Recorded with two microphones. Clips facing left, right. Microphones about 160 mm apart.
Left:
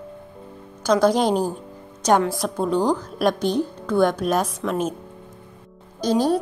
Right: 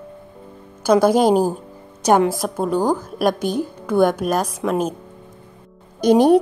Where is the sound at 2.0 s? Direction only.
10° right (ahead or behind).